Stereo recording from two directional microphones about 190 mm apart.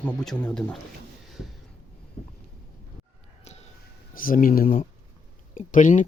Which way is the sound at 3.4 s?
35° left (ahead or behind).